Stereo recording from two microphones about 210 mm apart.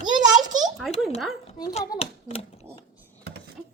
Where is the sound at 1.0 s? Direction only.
Centre (ahead or behind).